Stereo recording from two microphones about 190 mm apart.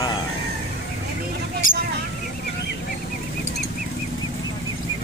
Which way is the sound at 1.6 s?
90° left.